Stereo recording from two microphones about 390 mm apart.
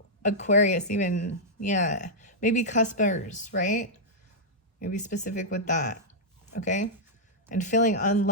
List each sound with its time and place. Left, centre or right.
0.2 s speech: centre